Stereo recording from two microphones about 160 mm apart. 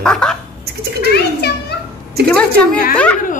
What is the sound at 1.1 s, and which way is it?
Speech, 90° left.